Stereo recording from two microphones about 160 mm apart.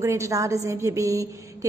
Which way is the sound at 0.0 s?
20° right (ahead or behind).